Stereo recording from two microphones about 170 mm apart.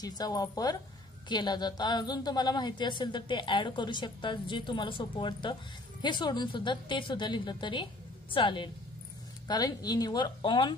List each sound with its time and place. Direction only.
0.0 s a woman's voice: 25° left (ahead or behind)